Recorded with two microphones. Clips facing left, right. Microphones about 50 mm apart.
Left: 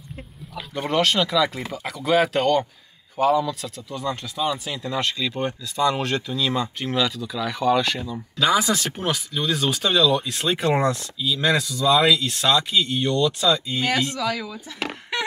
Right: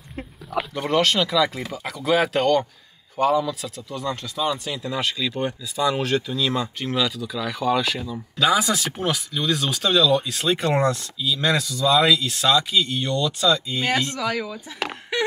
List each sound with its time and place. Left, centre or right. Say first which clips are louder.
0.7 s speech: even; centre
14.1 s speech: even; right
15.1 s a sound: right 4 dB; centre